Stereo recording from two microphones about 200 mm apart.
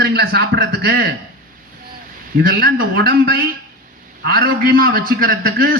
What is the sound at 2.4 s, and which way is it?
A man's voice, 50° right (ahead or behind).